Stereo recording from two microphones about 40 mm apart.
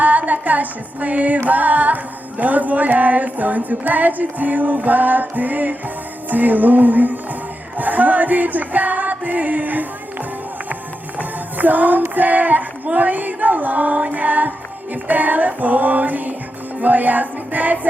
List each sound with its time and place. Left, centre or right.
0.0 s female singing: right
2.4 s music: right
11.2 s music: right